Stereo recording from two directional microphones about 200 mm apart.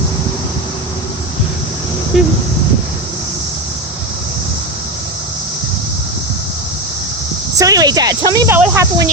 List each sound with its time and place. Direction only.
2.1 s speech: centre (ahead or behind)
7.6 s speech: 20° right (ahead or behind)